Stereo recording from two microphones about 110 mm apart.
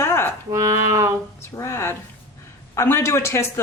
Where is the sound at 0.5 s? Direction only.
25° right (ahead or behind).